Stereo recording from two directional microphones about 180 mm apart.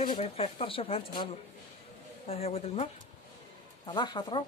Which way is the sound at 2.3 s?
35° left (ahead or behind).